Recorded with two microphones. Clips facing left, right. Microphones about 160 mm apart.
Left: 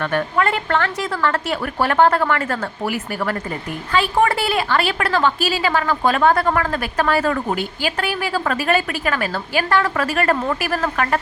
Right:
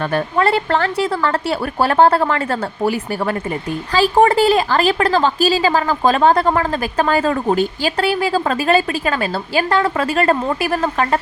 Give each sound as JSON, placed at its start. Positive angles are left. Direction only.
{"t": 0.0, "sound": "a woman's voice", "side_deg": -30}